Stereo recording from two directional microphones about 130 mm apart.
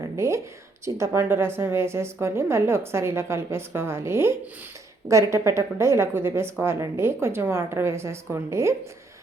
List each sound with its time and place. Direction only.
0.2 s a woman's voice: 20° right (ahead or behind)